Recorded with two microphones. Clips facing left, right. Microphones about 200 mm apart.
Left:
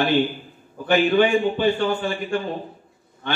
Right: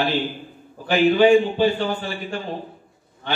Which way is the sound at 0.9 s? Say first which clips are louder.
Right 3 dB; 55° left (ahead or behind).